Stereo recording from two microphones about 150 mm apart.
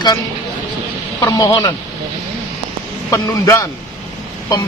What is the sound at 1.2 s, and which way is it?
Speech, 25° left (ahead or behind).